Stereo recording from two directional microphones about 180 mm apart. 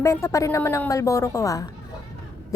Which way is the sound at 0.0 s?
15° left (ahead or behind).